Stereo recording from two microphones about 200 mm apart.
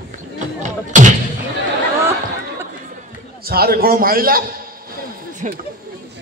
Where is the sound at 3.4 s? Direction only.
50° right (ahead or behind).